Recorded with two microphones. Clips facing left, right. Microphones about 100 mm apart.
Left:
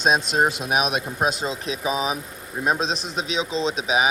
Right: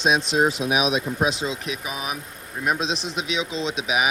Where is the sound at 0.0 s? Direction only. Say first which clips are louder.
Even; 45° left (ahead or behind); by 2.1 s 20° left (ahead or behind).